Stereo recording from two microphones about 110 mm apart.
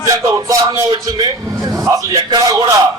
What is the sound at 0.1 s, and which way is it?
Speech, 30° right (ahead or behind).